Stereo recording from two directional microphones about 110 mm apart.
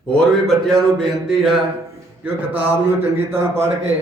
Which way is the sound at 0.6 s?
Centre (ahead or behind).